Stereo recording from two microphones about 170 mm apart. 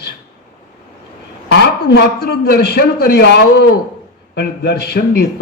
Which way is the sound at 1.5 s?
75° left (ahead or behind).